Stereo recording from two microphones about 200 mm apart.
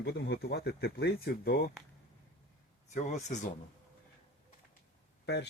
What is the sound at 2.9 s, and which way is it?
Speech, 35° left (ahead or behind).